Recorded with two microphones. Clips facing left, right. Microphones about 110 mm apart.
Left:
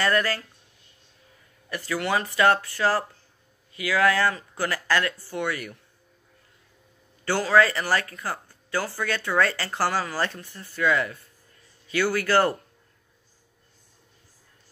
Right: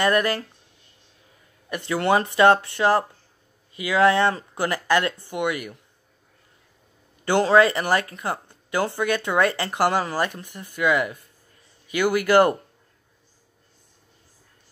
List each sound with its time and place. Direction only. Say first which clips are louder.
0.0 s speech: right 3 dB; 20° right (ahead or behind)
1.7 s speech: right 5 dB; 25° right (ahead or behind)
7.2 s speech: right 4 dB; 20° right (ahead or behind)